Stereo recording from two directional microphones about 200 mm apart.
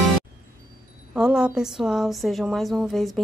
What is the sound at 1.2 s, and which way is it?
Speech, 5° right (ahead or behind).